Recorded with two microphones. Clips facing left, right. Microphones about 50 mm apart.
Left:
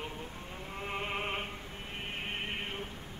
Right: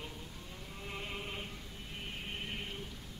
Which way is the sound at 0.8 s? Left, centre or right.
Left.